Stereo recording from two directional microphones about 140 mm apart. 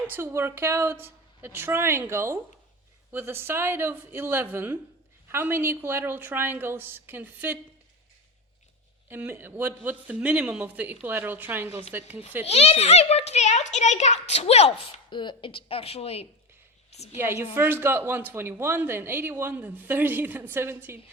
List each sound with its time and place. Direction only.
0.1 s speech: 20° right (ahead or behind)
9.0 s speech: 15° right (ahead or behind)
12.5 s a child's voice: 50° left (ahead or behind)
15.1 s a child's voice: 35° left (ahead or behind); by 17.2 s 50° left (ahead or behind)
17.5 s speech: 15° right (ahead or behind)